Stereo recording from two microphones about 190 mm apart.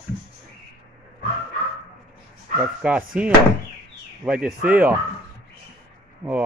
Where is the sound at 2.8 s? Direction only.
5° right (ahead or behind).